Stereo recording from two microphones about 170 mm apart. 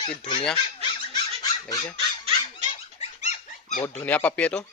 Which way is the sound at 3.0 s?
45° left (ahead or behind).